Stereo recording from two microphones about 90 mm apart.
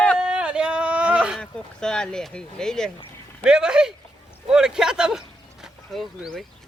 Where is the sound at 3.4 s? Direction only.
10° right (ahead or behind).